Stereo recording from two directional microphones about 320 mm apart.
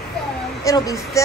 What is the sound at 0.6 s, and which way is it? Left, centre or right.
Speech, centre.